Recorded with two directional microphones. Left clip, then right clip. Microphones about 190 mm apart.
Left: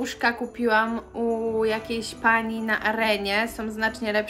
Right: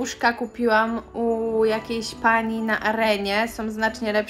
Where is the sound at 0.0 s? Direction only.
Centre (ahead or behind).